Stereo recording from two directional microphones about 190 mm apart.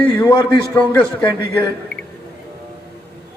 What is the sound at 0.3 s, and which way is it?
Speech, 25° left (ahead or behind).